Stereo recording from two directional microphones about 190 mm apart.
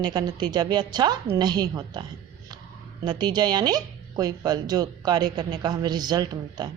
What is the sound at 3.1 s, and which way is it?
A woman's voice, 20° right (ahead or behind).